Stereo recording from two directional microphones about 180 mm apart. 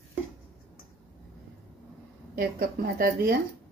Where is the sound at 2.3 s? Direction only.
55° right (ahead or behind).